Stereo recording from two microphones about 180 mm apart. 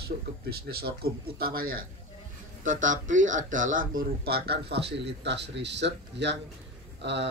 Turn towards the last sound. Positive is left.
turn(degrees=-75)  # may be behind; listen again after turning